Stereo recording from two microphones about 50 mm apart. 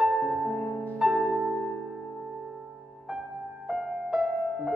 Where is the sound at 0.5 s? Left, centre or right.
Centre.